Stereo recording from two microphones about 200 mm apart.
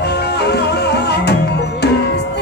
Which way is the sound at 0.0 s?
55° left (ahead or behind).